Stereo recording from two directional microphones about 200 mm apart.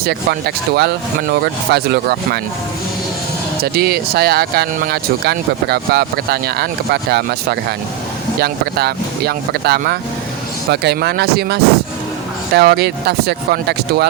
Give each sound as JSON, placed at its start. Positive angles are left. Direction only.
{"t": 0.0, "sound": "speech", "side_deg": -50}
{"t": 3.6, "sound": "speech", "side_deg": -50}